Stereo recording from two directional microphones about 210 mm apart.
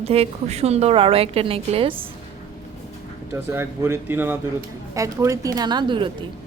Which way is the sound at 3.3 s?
10° right (ahead or behind).